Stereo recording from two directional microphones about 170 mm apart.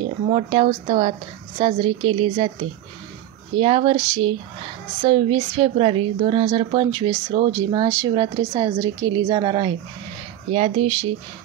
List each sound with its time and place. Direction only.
0.3 s a woman's voice: 35° right (ahead or behind)
3.5 s a woman's voice: 35° right (ahead or behind)
7.5 s a woman's voice: 20° right (ahead or behind)